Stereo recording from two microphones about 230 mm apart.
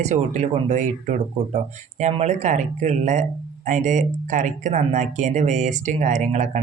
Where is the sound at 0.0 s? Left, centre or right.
Right.